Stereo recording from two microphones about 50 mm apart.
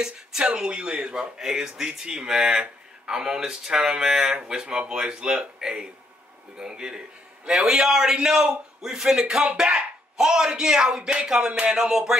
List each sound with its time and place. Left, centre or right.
0.0 s speech: centre